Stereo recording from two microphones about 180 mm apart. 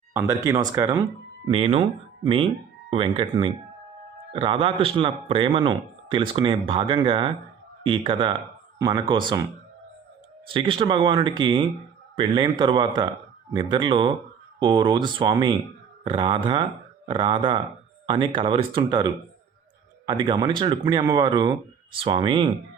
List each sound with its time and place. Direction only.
0.1 s speech: 15° right (ahead or behind)
1.5 s speech: 35° right (ahead or behind)